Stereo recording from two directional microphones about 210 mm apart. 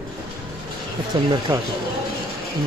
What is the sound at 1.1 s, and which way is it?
Speech, 25° right (ahead or behind).